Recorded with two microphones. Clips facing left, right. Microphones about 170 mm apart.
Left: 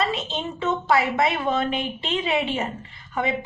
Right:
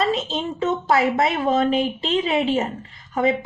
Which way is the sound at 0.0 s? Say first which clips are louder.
Right 4 dB; 40° right (ahead or behind).